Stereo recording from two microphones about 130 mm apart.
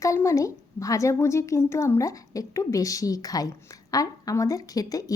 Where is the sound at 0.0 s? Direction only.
25° left (ahead or behind).